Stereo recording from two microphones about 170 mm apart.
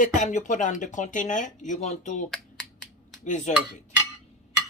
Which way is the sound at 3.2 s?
45° left (ahead or behind).